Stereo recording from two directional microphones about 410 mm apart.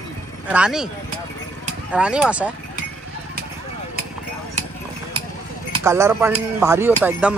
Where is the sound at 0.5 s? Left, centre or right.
Centre.